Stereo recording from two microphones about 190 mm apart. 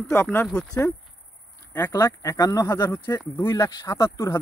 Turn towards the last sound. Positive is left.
turn(degrees=15)  # may be behind; listen again after turning